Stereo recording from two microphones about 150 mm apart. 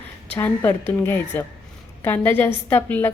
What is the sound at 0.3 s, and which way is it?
A woman's voice, 15° left (ahead or behind).